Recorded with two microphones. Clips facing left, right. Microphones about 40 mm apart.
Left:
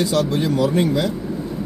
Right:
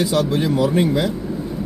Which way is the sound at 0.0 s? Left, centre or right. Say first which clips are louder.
Right 1 dB; centre.